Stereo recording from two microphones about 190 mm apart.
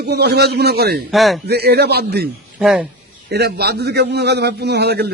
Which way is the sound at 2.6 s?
5° right (ahead or behind).